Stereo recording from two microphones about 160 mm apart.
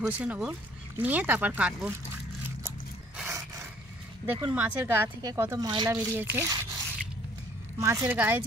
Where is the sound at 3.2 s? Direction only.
20° right (ahead or behind).